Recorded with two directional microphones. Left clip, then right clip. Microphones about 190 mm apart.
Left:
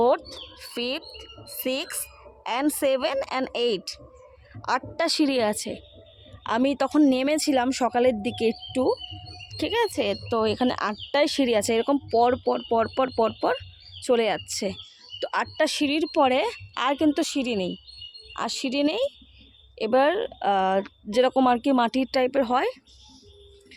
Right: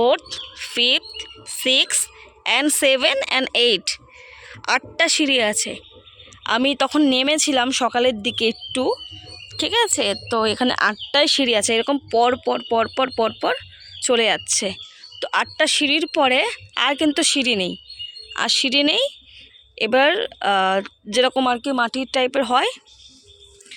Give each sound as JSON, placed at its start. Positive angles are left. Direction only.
{"t": 0.6, "sound": "speech", "side_deg": 0}
{"t": 21.4, "sound": "speech", "side_deg": 15}
{"t": 22.1, "sound": "speech", "side_deg": 0}